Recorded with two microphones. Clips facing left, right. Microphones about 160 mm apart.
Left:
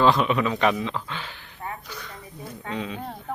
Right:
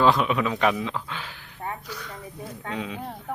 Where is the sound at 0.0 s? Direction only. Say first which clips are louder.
Left 1 dB; 5° right (ahead or behind).